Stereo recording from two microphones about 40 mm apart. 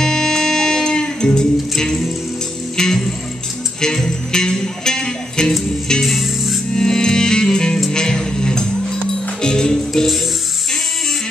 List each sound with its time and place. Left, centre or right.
0.0 s music: centre
6.0 s music: centre
6.7 s music: centre